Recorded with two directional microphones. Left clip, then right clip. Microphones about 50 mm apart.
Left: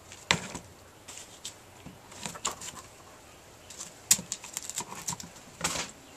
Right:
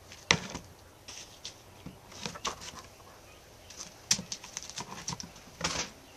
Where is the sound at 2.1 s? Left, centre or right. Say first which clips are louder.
Left 1 dB; right.